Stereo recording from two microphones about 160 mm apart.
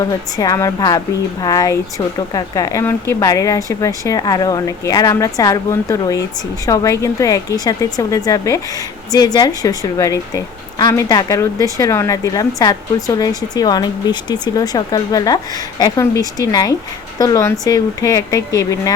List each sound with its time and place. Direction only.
0.3 s a woman's voice: 20° left (ahead or behind)